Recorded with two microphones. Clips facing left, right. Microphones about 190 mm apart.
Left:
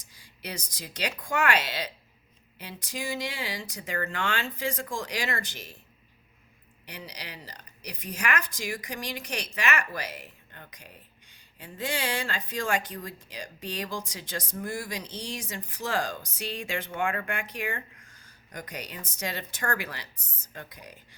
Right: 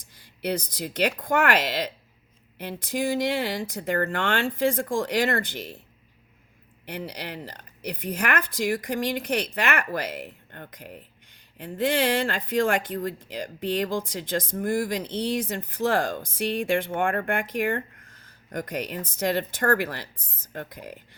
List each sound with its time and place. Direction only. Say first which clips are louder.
0.4 s a woman's voice: right 11 dB; 55° right (ahead or behind)
6.8 s a woman's voice: right 8 dB; 55° right (ahead or behind)